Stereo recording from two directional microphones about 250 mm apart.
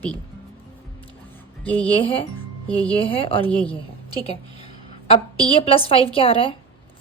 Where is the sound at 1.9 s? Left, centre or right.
Left.